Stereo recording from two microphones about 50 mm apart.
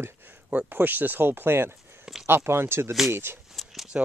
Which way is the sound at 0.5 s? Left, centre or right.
Right.